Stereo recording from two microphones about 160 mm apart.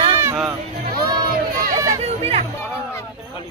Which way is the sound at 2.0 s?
40° right (ahead or behind).